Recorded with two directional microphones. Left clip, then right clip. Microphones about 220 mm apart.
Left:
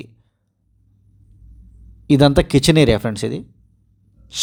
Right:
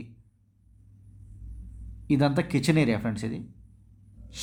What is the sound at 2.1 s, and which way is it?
Speech, 35° left (ahead or behind).